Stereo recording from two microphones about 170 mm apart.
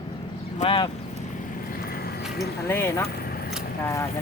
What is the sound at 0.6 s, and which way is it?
Speech, 25° left (ahead or behind).